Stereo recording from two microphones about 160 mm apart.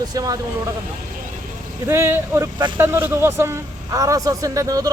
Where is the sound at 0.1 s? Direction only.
25° right (ahead or behind).